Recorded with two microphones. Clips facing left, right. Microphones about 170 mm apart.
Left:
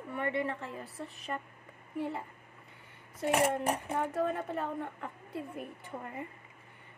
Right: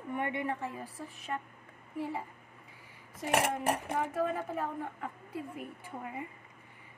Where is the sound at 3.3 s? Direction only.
75° right (ahead or behind).